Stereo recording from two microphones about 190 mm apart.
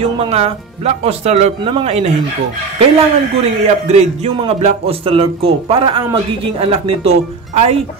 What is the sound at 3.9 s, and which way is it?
Speech, 35° right (ahead or behind).